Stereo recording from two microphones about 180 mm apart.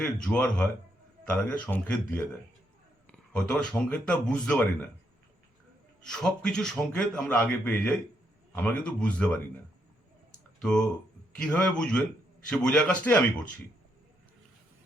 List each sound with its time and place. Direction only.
0.0 s a man's voice: 5° left (ahead or behind)
6.0 s a man's voice: 5° left (ahead or behind)
10.6 s a man's voice: 5° left (ahead or behind)